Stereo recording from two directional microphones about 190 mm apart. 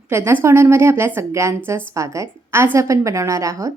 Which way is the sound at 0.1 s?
15° right (ahead or behind).